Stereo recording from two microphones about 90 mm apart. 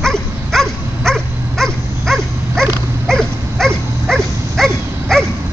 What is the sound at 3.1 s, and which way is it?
Livestock, 5° left (ahead or behind).